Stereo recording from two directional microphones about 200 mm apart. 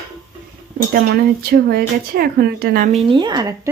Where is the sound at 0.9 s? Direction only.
50° right (ahead or behind).